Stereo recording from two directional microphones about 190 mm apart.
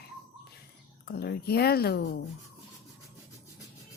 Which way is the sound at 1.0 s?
55° left (ahead or behind).